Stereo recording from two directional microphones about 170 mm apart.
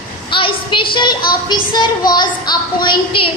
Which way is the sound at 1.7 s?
25° left (ahead or behind).